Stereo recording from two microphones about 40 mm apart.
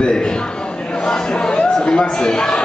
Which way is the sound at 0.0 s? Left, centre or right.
Centre.